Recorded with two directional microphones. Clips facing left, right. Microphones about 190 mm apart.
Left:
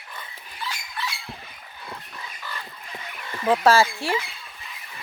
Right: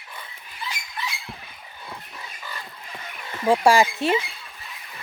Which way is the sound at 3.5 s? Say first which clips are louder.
Right 1 dB; 15° right (ahead or behind).